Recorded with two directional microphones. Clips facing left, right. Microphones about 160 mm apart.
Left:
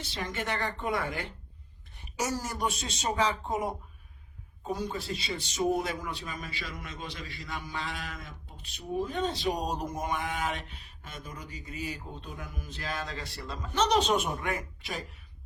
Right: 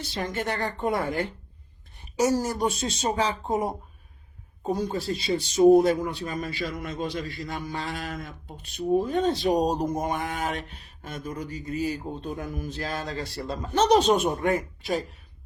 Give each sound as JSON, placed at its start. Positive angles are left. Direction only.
{"t": 0.0, "sound": "speech", "side_deg": -40}